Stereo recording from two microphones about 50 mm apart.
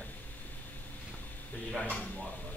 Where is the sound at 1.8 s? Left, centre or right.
Left.